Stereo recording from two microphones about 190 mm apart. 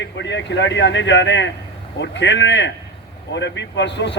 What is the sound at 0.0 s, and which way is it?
A man's voice, 70° left (ahead or behind).